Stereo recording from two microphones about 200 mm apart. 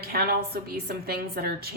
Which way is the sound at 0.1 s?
50° right (ahead or behind).